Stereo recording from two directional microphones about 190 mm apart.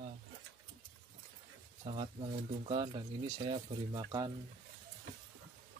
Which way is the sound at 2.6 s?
30° right (ahead or behind).